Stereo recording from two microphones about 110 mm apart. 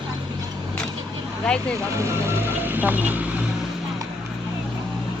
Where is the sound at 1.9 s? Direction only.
25° right (ahead or behind).